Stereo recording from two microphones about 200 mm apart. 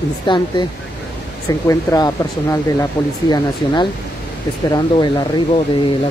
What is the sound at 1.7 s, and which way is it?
Speech, 15° left (ahead or behind).